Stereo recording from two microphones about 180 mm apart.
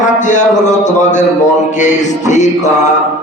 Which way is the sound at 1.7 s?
40° left (ahead or behind).